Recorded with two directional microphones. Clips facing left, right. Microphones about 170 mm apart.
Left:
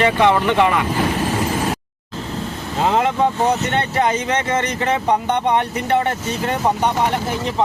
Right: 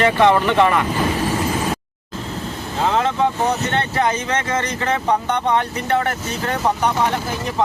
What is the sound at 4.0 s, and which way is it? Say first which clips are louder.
Speech: left 2 dB; 20° left (ahead or behind).